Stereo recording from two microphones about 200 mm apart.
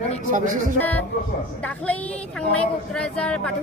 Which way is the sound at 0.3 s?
40° right (ahead or behind).